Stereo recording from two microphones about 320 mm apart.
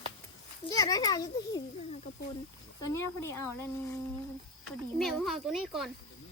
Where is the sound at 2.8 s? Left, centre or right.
Left.